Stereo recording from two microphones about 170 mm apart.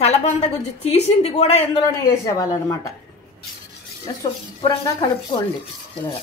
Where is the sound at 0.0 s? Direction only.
40° left (ahead or behind).